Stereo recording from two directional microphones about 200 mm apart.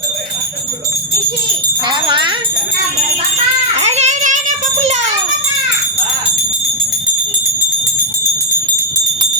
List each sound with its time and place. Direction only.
2.0 s jingle bell: 25° right (ahead or behind)
3.8 s child singing: 35° right (ahead or behind)